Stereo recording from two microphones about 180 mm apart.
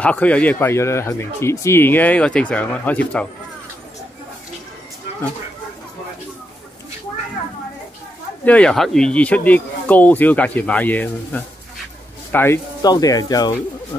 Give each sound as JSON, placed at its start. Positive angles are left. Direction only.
{"t": 0.0, "sound": "speech", "side_deg": 10}
{"t": 8.5, "sound": "speech", "side_deg": 5}
{"t": 12.8, "sound": "speech", "side_deg": 20}